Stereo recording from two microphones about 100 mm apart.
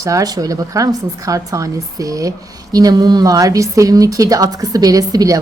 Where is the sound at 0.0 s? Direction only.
35° right (ahead or behind).